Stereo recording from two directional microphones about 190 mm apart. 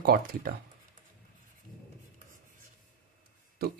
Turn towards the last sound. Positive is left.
turn(degrees=-55)  # may be behind; listen again after turning